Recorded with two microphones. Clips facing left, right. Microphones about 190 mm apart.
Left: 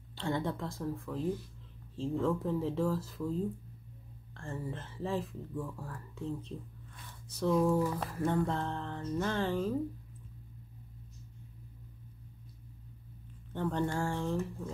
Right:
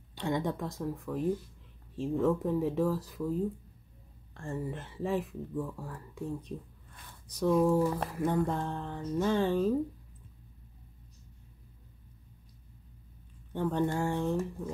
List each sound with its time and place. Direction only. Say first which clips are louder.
0.1 s speech: right 2 dB; 15° right (ahead or behind)
13.5 s speech: right 3 dB; 15° right (ahead or behind)